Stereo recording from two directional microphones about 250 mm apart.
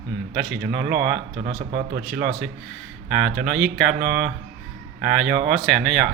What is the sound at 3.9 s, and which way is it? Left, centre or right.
Speech, right.